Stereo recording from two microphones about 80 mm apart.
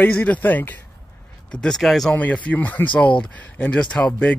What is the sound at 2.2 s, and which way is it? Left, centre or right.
Speech, centre.